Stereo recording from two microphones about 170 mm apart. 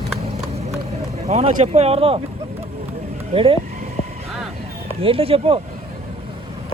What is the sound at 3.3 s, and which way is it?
Speech, 35° right (ahead or behind).